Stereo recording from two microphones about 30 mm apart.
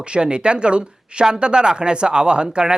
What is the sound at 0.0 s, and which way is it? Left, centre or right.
Speech, right.